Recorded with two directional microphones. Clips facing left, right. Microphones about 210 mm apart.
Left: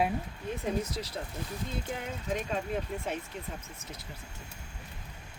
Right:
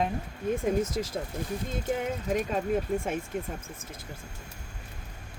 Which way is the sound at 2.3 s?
45° right (ahead or behind).